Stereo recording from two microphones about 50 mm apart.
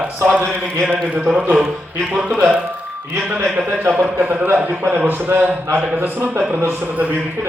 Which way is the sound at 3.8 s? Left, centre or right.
Right.